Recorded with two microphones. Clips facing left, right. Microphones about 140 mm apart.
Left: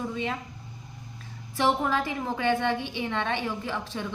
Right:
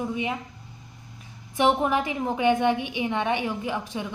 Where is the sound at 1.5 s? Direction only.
20° right (ahead or behind).